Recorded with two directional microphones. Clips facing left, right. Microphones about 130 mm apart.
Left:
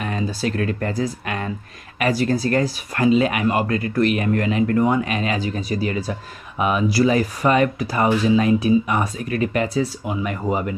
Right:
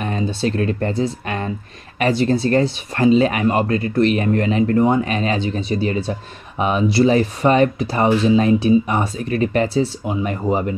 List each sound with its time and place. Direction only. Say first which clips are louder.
0.0 s speech: right 3 dB; 30° right (ahead or behind)